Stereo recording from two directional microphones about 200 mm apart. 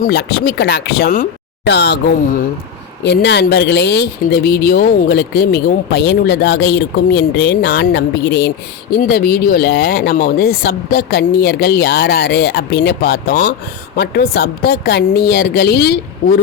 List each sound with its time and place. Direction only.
0.0 s speech: 55° left (ahead or behind)
3.0 s speech: 60° left (ahead or behind)